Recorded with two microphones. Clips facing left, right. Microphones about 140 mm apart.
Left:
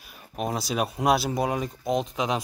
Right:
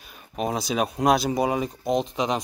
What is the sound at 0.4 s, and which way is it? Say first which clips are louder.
Speech: right 2 dB; centre (ahead or behind).